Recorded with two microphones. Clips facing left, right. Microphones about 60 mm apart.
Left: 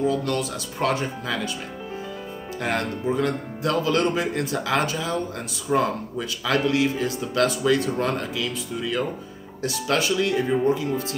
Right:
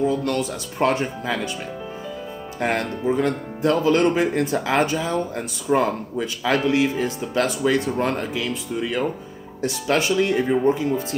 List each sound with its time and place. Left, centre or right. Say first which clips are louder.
0.0 s speech: right 2 dB; right
2.6 s speech: right 3 dB; right